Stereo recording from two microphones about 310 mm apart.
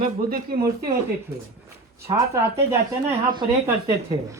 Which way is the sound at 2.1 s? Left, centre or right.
Centre.